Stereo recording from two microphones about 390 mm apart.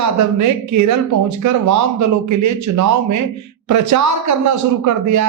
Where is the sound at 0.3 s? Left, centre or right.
Right.